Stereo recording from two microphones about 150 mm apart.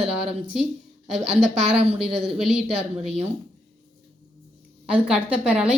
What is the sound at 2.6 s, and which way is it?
Speech, 40° right (ahead or behind).